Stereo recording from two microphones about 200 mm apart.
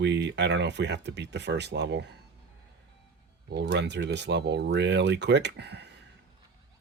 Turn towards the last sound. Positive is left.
turn(degrees=-60)  # may be behind; listen again after turning